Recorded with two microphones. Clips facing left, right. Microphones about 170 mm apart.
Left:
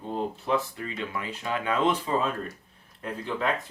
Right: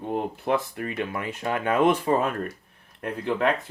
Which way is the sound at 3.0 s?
65° right (ahead or behind).